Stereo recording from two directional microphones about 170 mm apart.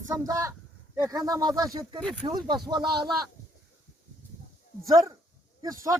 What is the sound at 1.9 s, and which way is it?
Speech, 5° left (ahead or behind).